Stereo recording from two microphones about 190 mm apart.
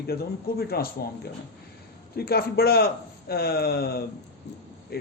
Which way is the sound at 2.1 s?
55° left (ahead or behind).